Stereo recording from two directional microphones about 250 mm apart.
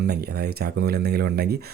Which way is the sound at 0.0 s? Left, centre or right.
Right.